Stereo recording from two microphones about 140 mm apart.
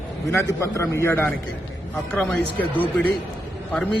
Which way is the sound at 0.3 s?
20° left (ahead or behind).